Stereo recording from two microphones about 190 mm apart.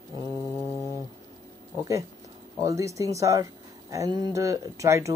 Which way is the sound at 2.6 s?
15° right (ahead or behind).